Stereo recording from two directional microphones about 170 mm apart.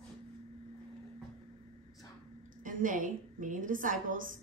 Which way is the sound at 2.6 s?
50° right (ahead or behind).